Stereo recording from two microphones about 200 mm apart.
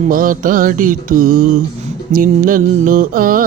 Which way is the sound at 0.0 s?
45° right (ahead or behind).